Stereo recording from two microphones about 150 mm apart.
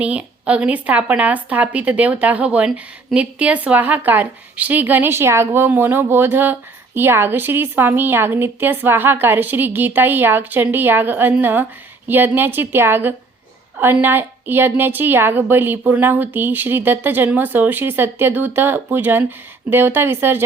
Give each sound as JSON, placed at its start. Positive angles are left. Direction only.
{"t": 0.0, "sound": "a woman's voice", "side_deg": -10}